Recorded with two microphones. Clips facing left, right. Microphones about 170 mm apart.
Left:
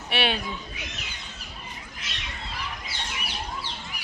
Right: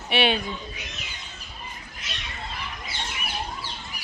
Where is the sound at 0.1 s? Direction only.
Centre (ahead or behind).